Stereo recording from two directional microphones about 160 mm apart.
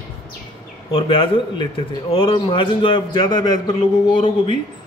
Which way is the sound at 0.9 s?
30° left (ahead or behind).